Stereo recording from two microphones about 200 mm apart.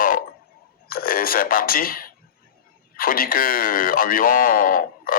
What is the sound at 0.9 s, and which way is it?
Speech, 45° left (ahead or behind).